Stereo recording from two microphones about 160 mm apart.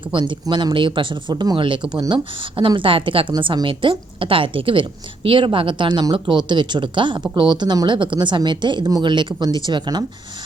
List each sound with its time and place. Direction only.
0.1 s a woman's voice: 30° right (ahead or behind)